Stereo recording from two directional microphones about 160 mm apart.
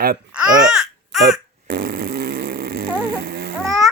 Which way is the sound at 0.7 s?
5° right (ahead or behind).